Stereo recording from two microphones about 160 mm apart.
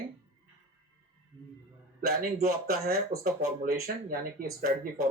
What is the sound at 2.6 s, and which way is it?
Speech, 70° right (ahead or behind).